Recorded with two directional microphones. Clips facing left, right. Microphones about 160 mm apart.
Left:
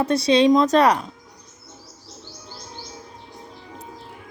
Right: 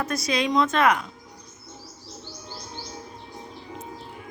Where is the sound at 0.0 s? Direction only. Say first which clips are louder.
Left 9 dB; 30° left (ahead or behind).